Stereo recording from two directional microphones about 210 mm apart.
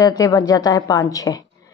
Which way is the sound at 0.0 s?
15° left (ahead or behind).